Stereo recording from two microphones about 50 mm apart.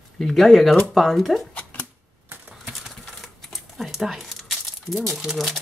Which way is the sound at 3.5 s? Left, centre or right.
Centre.